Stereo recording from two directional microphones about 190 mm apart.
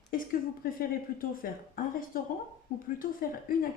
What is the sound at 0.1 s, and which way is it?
Speech, 50° left (ahead or behind).